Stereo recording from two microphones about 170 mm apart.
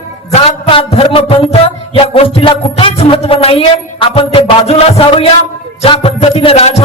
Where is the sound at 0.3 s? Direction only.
35° left (ahead or behind).